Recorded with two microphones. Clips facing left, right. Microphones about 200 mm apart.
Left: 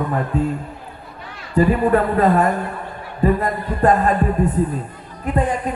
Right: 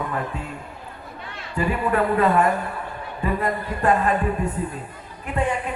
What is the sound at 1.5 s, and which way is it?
A man's voice, 40° left (ahead or behind).